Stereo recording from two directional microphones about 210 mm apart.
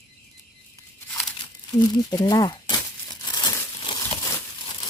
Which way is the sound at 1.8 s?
20° left (ahead or behind).